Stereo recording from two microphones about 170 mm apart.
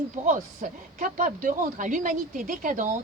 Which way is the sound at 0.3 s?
50° right (ahead or behind).